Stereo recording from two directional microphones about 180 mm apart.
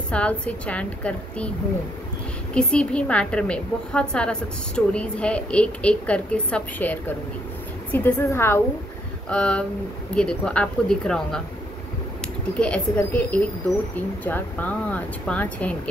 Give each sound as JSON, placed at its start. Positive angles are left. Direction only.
{"t": 0.1, "sound": "speech", "side_deg": 5}
{"t": 2.5, "sound": "a woman's voice", "side_deg": 5}
{"t": 12.5, "sound": "speech", "side_deg": 5}